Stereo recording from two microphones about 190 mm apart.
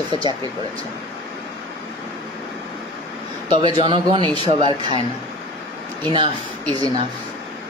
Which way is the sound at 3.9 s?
25° right (ahead or behind).